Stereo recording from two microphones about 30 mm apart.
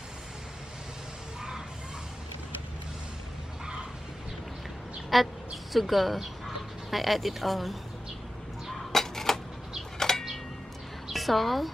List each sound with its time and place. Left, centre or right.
5.1 s speech: centre
8.9 s a sound: centre
11.1 s speech: centre